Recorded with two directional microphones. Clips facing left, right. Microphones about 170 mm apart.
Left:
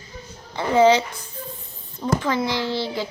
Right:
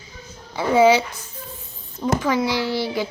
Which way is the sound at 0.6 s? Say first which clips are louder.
Right 1 dB; 10° right (ahead or behind).